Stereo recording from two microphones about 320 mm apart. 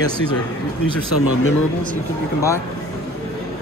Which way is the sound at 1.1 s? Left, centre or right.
Left.